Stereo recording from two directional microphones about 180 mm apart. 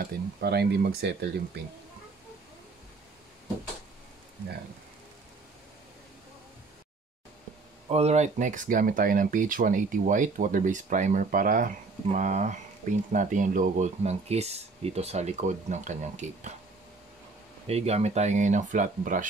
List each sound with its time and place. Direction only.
0.0 s speech: 60° right (ahead or behind)
7.9 s speech: 35° right (ahead or behind)
17.6 s speech: 35° right (ahead or behind)